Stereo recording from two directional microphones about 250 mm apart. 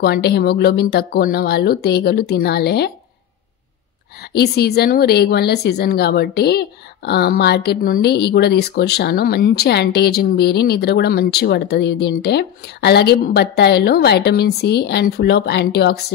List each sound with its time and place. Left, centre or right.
0.0 s a woman's voice: left
4.2 s a woman's voice: left